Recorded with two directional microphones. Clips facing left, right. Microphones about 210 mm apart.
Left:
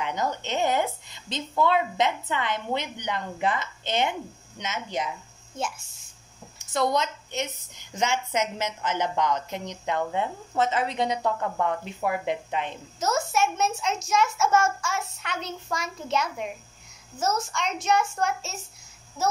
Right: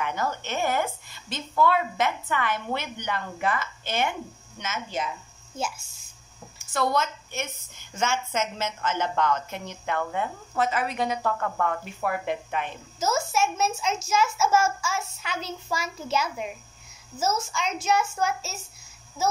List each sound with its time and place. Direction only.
0.0 s a woman's voice: 20° left (ahead or behind)
5.6 s a child's voice: centre (ahead or behind)
6.6 s a woman's voice: 20° left (ahead or behind)
13.0 s a child's voice: centre (ahead or behind)